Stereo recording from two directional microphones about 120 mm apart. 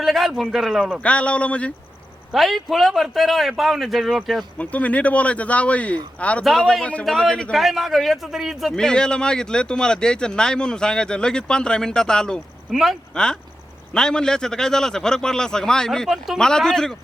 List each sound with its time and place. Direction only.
0.0 s a man's voice: centre (ahead or behind)
1.0 s a man's voice: 10° left (ahead or behind)
2.3 s a man's voice: centre (ahead or behind)
4.5 s a man's voice: 10° left (ahead or behind)